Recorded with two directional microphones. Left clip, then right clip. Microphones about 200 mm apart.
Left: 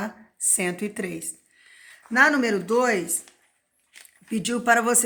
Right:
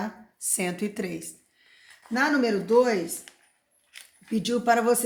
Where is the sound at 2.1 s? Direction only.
25° left (ahead or behind).